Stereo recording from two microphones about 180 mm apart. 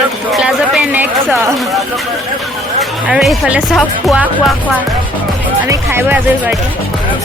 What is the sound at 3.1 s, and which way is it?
Speech, 5° right (ahead or behind).